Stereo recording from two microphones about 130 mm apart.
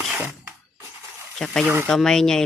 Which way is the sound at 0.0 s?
5° right (ahead or behind).